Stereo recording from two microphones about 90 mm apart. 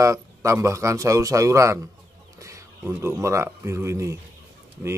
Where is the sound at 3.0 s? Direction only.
35° right (ahead or behind).